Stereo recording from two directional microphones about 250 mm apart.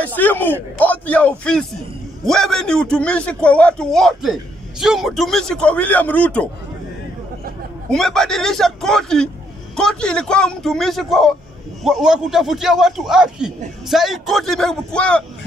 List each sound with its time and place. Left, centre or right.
0.0 s a man's voice: centre
7.9 s a man's voice: centre